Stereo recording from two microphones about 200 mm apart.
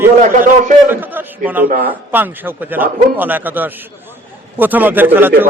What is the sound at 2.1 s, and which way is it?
A man's voice, 10° right (ahead or behind).